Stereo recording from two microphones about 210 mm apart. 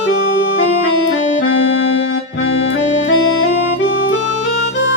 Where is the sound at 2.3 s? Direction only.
65° left (ahead or behind).